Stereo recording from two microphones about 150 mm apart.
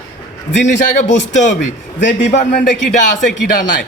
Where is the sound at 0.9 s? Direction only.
50° left (ahead or behind).